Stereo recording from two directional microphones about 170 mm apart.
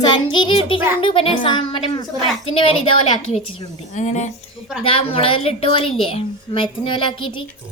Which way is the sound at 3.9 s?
45° left (ahead or behind).